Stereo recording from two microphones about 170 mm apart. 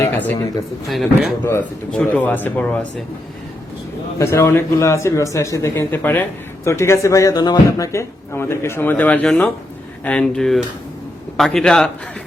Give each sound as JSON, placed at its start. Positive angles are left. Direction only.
{"t": 0.0, "sound": "speech", "side_deg": 10}
{"t": 1.5, "sound": "speech", "side_deg": 10}
{"t": 4.2, "sound": "speech", "side_deg": 15}